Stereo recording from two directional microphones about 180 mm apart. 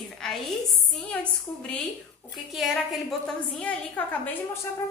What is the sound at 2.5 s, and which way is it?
A woman's voice, centre (ahead or behind).